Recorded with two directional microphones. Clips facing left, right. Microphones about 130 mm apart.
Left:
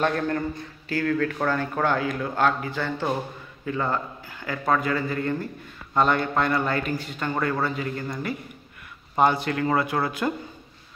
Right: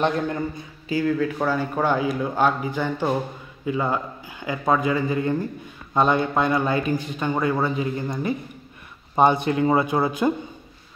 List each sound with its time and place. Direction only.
0.0 s a man's voice: 15° right (ahead or behind)